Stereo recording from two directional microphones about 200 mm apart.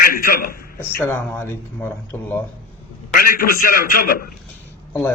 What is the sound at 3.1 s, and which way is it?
A man's voice, 45° left (ahead or behind).